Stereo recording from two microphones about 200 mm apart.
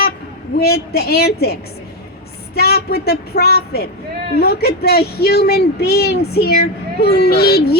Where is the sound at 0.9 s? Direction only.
50° left (ahead or behind).